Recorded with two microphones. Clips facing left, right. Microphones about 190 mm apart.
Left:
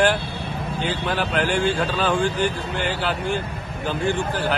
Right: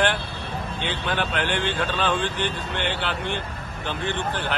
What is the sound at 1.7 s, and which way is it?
Speech, 40° left (ahead or behind).